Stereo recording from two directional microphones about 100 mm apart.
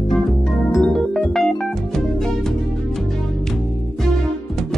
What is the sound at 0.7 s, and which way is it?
Organ, 5° left (ahead or behind).